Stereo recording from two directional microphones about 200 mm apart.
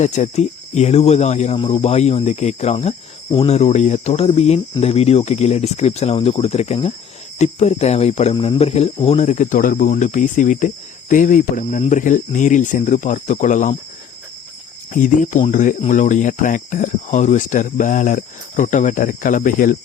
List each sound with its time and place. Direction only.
0.0 s speech: 35° left (ahead or behind)
14.9 s speech: 40° left (ahead or behind)